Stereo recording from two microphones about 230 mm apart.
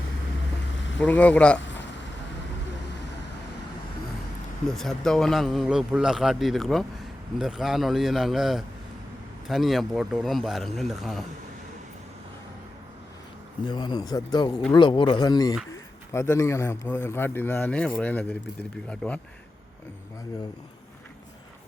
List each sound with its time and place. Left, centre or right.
1.0 s a man's voice: centre
1.5 s vehicle: left
4.7 s a man's voice: centre
13.7 s a man's voice: centre